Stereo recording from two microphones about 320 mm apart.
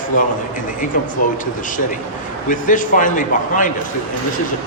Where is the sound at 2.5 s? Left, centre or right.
Left.